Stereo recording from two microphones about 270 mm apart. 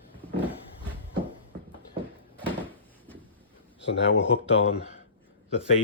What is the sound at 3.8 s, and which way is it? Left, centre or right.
Speech, left.